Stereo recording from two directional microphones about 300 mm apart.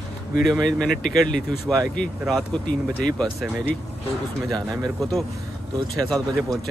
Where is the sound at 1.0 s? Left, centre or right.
Left.